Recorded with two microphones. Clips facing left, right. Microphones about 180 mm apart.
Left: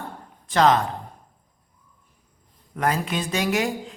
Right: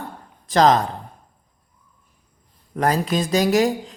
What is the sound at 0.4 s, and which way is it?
Speech, 35° right (ahead or behind).